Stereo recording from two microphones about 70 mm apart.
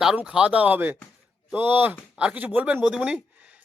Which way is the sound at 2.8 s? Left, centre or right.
Centre.